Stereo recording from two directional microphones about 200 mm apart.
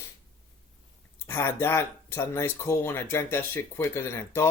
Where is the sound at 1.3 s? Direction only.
10° left (ahead or behind).